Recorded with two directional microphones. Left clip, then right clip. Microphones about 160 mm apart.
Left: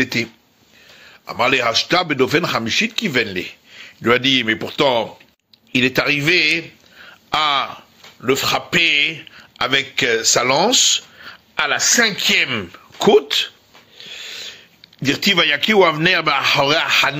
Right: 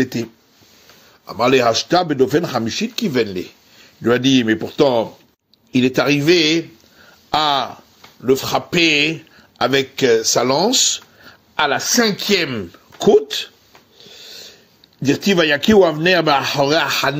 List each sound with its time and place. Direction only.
0.0 s speech: 30° right (ahead or behind)
1.2 s a man's voice: 55° right (ahead or behind)
4.1 s a man's voice: 35° right (ahead or behind); by 6.6 s 60° right (ahead or behind)
7.2 s speech: 40° right (ahead or behind)
8.3 s speech: 60° right (ahead or behind)
12.0 s speech: 60° right (ahead or behind)
12.7 s speech: 35° right (ahead or behind)
13.9 s a sound: 60° right (ahead or behind); by 15.1 s 40° right (ahead or behind)
15.2 s speech: 30° right (ahead or behind); by 17.2 s 50° right (ahead or behind)